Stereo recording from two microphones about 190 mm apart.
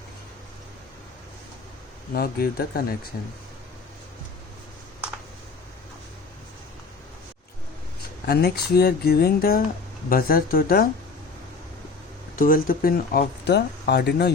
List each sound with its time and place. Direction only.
2.1 s speech: 55° left (ahead or behind)
8.3 s speech: 55° left (ahead or behind)
12.4 s speech: 45° left (ahead or behind)